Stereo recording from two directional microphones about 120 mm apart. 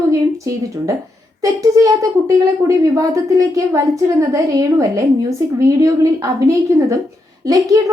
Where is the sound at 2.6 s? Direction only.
30° right (ahead or behind).